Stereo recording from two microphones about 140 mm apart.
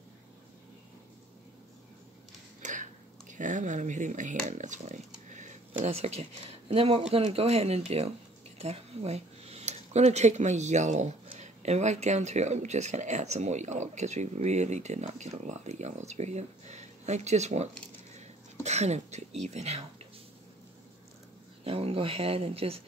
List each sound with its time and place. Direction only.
2.6 s speech: 65° right (ahead or behind)
5.3 s a sound: 60° right (ahead or behind)
5.8 s speech: 45° right (ahead or behind)
18.1 s a sound: 55° right (ahead or behind)
19.4 s speech: 50° right (ahead or behind)
21.6 s speech: 45° right (ahead or behind)